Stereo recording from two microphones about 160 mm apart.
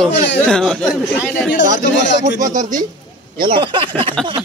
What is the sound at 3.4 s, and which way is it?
Speech, 30° right (ahead or behind).